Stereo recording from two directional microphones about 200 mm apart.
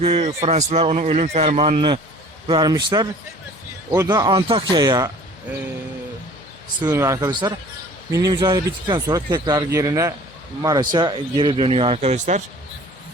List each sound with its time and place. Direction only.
0.0 s speech: 30° right (ahead or behind)
2.5 s speech: 20° right (ahead or behind)
6.8 s speech: 15° right (ahead or behind); by 12.4 s 35° right (ahead or behind)